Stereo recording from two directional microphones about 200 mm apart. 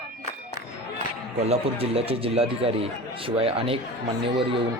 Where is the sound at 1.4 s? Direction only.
30° right (ahead or behind).